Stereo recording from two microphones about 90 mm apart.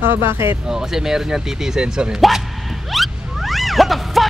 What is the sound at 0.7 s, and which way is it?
Speech, 5° right (ahead or behind).